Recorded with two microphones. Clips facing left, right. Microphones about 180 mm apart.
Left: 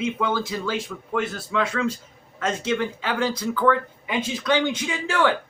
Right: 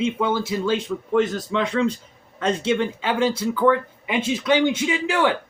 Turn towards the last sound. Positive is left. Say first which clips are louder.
# right 2 dB
turn(degrees=-20)  # may be behind; listen again after turning